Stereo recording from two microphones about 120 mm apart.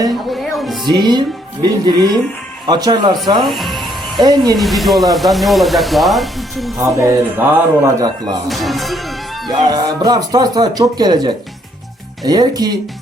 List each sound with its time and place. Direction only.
0.3 s music: centre (ahead or behind)
0.9 s speech: 35° right (ahead or behind)
3.4 s speech: centre (ahead or behind)
4.2 s speech: 35° right (ahead or behind)
4.5 s speech: centre (ahead or behind)
6.9 s speech: 25° right (ahead or behind)
8.4 s speech: centre (ahead or behind)
9.5 s speech: 35° right (ahead or behind)